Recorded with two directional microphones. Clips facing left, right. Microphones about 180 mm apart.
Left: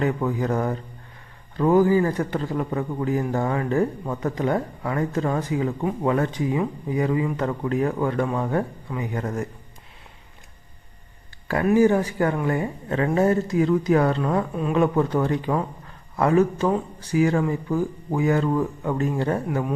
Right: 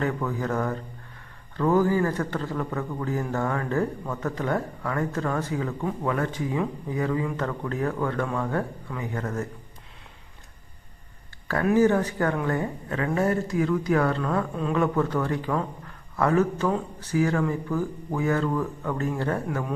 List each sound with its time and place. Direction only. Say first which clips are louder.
0.0 s a man's voice: left 4 dB; 20° left (ahead or behind)
11.6 s a man's voice: left 2 dB; 10° left (ahead or behind)
13.1 s a man's voice: left 4 dB; 20° left (ahead or behind)
19.5 s a man's voice: left 4 dB; 5° left (ahead or behind)